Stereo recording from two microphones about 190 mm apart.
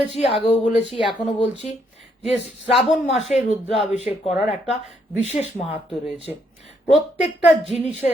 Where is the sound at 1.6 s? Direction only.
35° left (ahead or behind).